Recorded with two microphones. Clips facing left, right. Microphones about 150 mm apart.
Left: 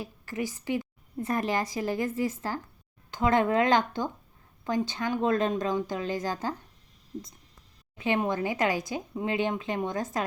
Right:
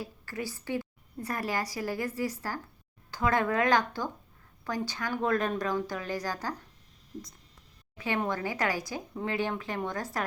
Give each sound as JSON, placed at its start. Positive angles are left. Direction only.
{"t": 0.0, "sound": "a woman's voice", "side_deg": 20}
{"t": 7.9, "sound": "a woman's voice", "side_deg": 20}